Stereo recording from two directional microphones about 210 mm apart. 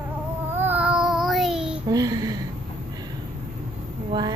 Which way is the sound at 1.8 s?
15° right (ahead or behind).